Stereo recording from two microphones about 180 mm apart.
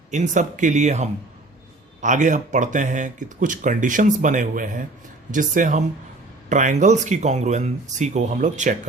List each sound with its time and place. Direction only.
0.1 s speech: 40° right (ahead or behind)